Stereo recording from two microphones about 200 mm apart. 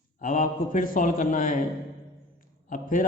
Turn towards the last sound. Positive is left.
turn(degrees=40)  # may be behind; listen again after turning